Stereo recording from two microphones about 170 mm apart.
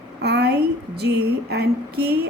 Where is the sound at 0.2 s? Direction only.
75° right (ahead or behind).